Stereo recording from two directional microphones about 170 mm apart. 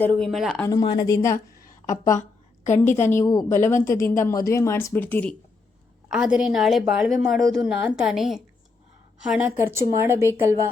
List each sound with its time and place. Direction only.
0.2 s a woman's voice: centre (ahead or behind)
0.7 s a woman's voice: 20° left (ahead or behind)
6.1 s a woman's voice: 5° right (ahead or behind)